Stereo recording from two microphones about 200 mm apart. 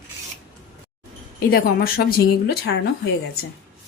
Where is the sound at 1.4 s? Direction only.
50° left (ahead or behind).